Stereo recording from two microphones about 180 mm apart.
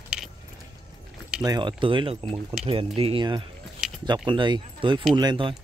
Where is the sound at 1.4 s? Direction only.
25° right (ahead or behind).